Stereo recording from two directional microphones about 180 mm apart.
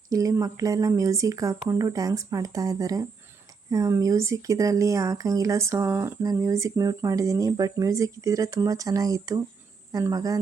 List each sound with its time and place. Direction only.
0.1 s speech: 20° right (ahead or behind)